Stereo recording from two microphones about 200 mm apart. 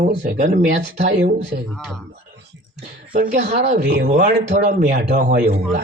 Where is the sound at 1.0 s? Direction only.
55° right (ahead or behind).